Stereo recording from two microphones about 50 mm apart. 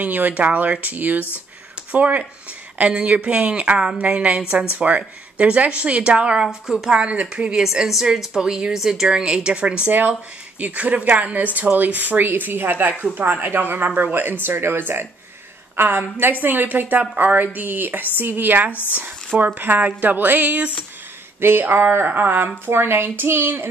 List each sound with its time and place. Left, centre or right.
0.0 s speech: right; by 7.0 s centre
7.0 s speech: right
7.5 s a woman's voice: centre; by 17.5 s right
17.6 s speech: right
18.7 s speech: left
18.9 s speech: right
21.4 s speech: right